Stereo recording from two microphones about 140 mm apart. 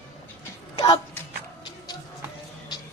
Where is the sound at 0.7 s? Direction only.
40° left (ahead or behind).